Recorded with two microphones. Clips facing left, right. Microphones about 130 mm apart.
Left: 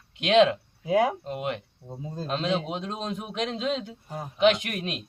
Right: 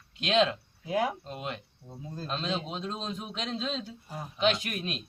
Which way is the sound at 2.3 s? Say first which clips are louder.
Left 6 dB; 70° left (ahead or behind).